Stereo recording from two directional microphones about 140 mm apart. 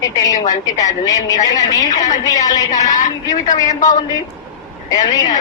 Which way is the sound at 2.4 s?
25° left (ahead or behind).